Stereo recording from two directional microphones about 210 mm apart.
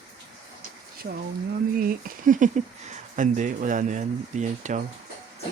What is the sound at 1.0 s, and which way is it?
Speech, 45° right (ahead or behind).